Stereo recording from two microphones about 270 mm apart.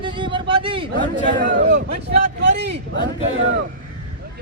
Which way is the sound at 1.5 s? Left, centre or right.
Right.